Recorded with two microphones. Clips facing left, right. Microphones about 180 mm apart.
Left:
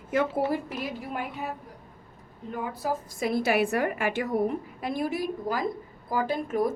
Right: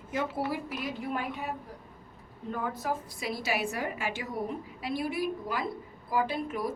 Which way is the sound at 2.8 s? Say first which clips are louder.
Left 5 dB; 45° left (ahead or behind).